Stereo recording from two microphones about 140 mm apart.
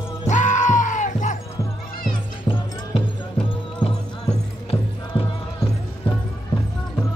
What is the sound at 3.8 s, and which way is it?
Music, 40° left (ahead or behind).